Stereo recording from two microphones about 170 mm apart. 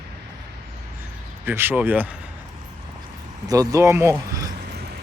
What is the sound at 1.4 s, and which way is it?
Speech, 10° right (ahead or behind).